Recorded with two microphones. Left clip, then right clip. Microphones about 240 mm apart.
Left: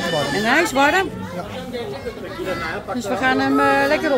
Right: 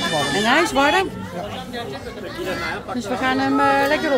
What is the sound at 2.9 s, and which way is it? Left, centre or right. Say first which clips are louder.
A woman's voice: left 3 dB; centre.